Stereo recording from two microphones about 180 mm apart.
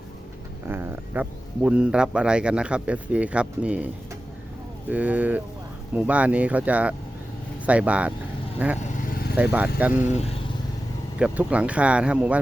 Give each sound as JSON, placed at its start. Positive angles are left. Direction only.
{"t": 0.7, "sound": "speech", "side_deg": -10}
{"t": 4.9, "sound": "speech", "side_deg": -10}
{"t": 8.5, "sound": "vehicle", "side_deg": -10}
{"t": 8.9, "sound": "vehicle", "side_deg": 45}
{"t": 9.3, "sound": "speech", "side_deg": -10}
{"t": 10.1, "sound": "speech", "side_deg": 35}
{"t": 11.2, "sound": "speech", "side_deg": -5}